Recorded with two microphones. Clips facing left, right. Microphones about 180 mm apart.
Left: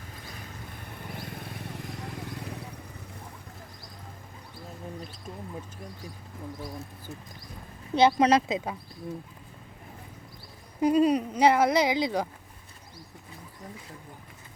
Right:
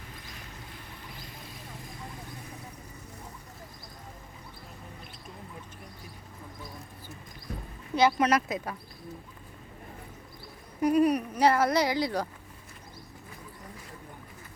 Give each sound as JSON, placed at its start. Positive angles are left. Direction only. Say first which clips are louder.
{"t": 0.7, "sound": "vehicle", "louder": "left 5 dB", "side_deg": 60}
{"t": 7.9, "sound": "speech", "louder": "left 3 dB", "side_deg": 25}
{"t": 10.8, "sound": "speech", "louder": "left 1 dB", "side_deg": 25}